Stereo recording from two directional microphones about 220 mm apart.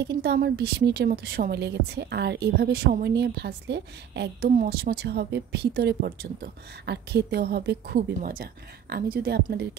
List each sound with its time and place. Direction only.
0.0 s a woman's voice: 50° right (ahead or behind)